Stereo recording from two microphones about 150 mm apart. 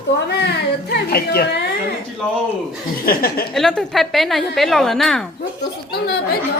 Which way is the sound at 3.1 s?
80° left.